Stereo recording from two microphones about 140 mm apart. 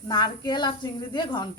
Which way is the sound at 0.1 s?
30° left (ahead or behind).